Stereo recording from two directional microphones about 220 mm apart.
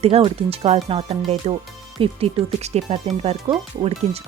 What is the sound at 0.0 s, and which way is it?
Speech, 25° right (ahead or behind).